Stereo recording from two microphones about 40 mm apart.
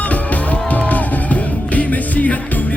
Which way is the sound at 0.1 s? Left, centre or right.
Left.